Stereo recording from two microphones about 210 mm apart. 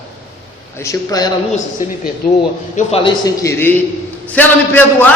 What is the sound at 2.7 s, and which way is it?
A man's voice, 25° left (ahead or behind).